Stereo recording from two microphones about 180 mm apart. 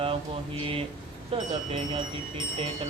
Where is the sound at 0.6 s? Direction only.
30° right (ahead or behind).